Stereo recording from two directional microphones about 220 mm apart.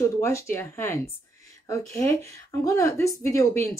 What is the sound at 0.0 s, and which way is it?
Speech, 10° left (ahead or behind).